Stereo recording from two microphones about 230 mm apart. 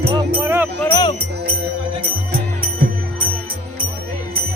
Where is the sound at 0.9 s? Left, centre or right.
Centre.